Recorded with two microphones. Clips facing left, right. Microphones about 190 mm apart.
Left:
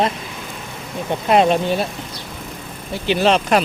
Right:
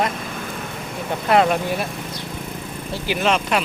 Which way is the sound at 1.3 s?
20° left (ahead or behind).